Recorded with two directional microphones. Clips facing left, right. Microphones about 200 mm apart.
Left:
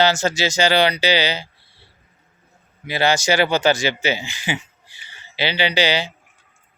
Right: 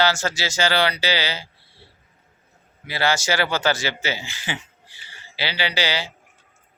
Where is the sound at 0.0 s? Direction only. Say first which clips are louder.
Left 4 dB; 20° left (ahead or behind).